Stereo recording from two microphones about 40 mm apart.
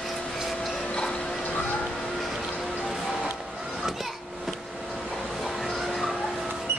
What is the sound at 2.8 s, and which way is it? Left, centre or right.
Music, centre.